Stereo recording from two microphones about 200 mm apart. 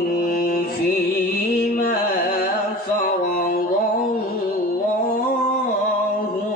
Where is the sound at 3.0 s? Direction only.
45° left (ahead or behind).